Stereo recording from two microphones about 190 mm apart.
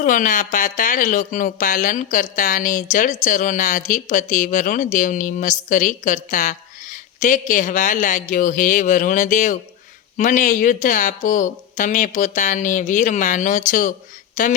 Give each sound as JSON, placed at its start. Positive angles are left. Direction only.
{"t": 0.0, "sound": "speech", "side_deg": 45}